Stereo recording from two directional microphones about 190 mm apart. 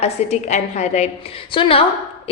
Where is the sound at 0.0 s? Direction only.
35° left (ahead or behind).